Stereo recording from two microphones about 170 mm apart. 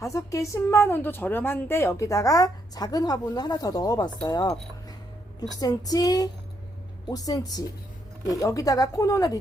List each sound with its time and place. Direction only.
0.0 s a woman's voice: 20° left (ahead or behind)